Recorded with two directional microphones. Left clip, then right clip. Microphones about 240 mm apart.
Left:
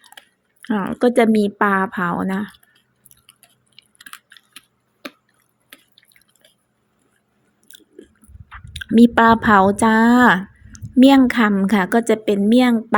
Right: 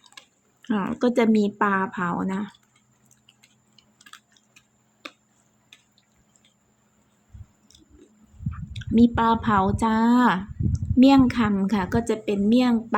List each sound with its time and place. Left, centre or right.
0.1 s a sound: centre
0.6 s speech: centre
3.8 s chewing: left
8.4 s speech: left